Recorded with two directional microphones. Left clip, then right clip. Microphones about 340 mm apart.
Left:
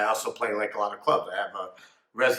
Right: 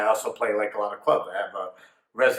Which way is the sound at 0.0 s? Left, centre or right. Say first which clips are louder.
Right 3 dB; centre.